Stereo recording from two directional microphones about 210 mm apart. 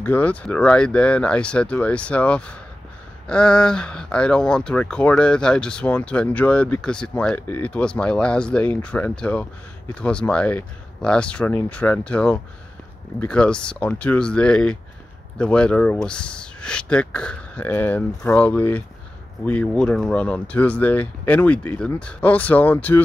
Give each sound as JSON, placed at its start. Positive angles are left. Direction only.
{"t": 0.0, "sound": "speech", "side_deg": 10}